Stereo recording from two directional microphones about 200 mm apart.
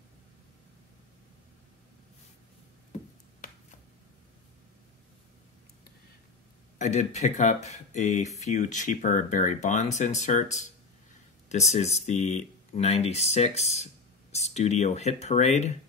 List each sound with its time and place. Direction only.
6.8 s speech: 35° left (ahead or behind)